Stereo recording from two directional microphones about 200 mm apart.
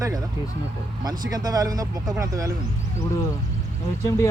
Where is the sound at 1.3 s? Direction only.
20° right (ahead or behind).